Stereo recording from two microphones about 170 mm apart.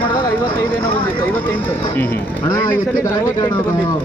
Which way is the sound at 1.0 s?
10° left (ahead or behind).